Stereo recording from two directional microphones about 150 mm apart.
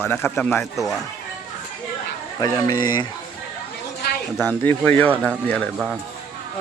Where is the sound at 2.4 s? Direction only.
25° left (ahead or behind).